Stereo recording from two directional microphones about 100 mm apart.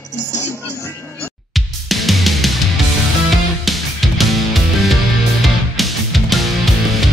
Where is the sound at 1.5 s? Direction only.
Centre (ahead or behind).